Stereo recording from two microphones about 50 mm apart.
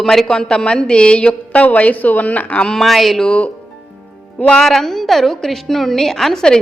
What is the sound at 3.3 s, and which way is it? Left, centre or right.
Speech, left.